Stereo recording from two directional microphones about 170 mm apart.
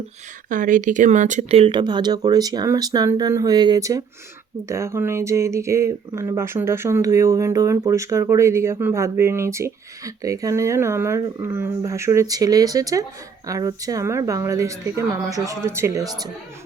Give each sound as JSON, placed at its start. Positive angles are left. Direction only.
{"t": 0.5, "sound": "speech", "side_deg": -50}